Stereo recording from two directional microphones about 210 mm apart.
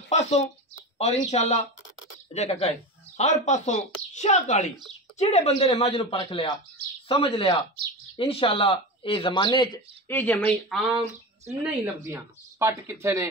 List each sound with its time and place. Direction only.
0.1 s speech: 30° left (ahead or behind)
10.1 s speech: 10° left (ahead or behind)
11.8 s speech: 15° right (ahead or behind)